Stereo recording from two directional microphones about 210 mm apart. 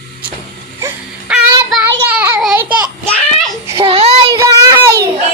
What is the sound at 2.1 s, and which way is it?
Child singing, 5° right (ahead or behind).